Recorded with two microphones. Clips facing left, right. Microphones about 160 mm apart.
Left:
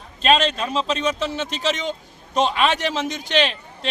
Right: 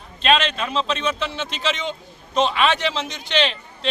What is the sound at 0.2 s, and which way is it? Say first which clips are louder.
A man's voice: left 1 dB; 40° left (ahead or behind).